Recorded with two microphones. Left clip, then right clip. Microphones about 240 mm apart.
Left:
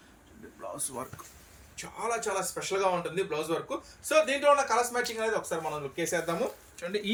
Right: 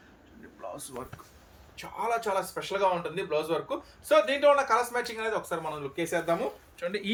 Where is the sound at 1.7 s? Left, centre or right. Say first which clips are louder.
Right 3 dB; centre.